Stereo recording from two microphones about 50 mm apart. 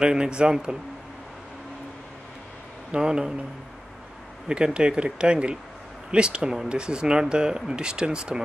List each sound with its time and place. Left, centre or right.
0.0 s speech: centre
2.9 s speech: centre
4.5 s speech: centre